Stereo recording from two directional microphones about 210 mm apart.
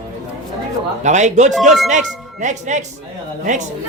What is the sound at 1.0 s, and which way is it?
Speech, 35° right (ahead or behind).